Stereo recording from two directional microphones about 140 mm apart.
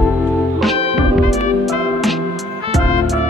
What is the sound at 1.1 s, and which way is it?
Music, centre (ahead or behind).